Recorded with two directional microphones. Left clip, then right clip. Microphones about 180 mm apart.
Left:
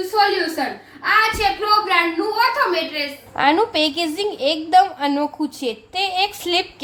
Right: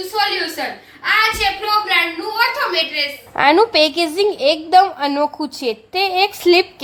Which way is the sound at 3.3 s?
30° right (ahead or behind).